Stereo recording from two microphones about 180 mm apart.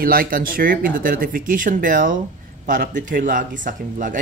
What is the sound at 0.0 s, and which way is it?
Speech, 55° right (ahead or behind).